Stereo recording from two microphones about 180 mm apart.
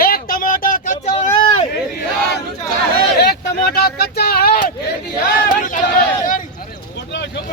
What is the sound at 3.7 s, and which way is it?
Speech, 60° left (ahead or behind).